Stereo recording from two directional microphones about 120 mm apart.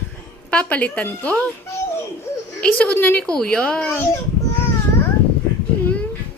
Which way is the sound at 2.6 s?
10° left (ahead or behind).